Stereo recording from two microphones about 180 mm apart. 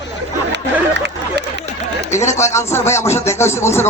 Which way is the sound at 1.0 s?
70° right (ahead or behind).